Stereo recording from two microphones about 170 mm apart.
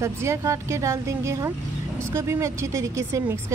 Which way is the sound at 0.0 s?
15° right (ahead or behind).